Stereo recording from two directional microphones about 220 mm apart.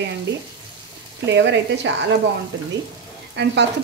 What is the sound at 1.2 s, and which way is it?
Speech, 55° right (ahead or behind).